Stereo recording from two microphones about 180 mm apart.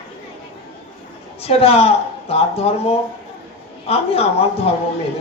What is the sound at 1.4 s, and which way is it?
A man's voice, 35° left (ahead or behind).